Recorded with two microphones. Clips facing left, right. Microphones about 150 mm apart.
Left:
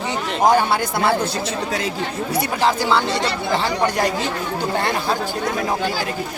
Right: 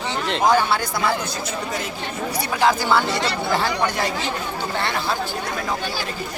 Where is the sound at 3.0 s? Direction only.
25° left (ahead or behind).